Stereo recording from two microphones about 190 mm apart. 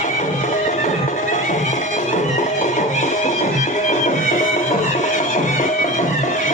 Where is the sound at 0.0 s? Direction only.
40° left (ahead or behind).